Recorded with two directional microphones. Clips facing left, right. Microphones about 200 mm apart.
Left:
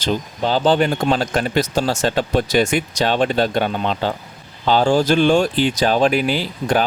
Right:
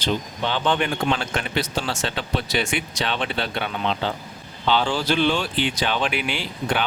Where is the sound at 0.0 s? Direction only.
40° left (ahead or behind).